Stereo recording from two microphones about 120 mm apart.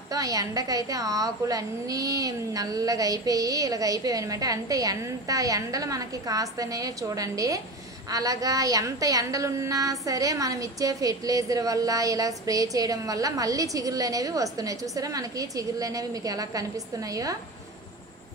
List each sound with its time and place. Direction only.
0.1 s a woman's voice: 30° right (ahead or behind)